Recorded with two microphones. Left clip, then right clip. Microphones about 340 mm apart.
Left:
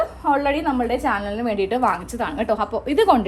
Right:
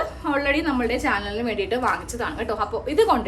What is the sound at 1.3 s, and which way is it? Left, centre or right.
A woman's voice, centre.